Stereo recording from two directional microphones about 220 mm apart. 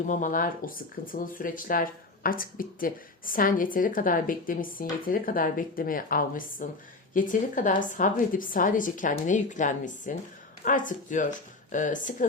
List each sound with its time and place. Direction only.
0.1 s speech: 35° left (ahead or behind)